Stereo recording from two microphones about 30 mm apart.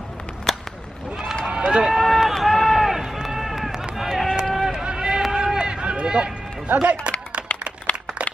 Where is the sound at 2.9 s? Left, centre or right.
Centre.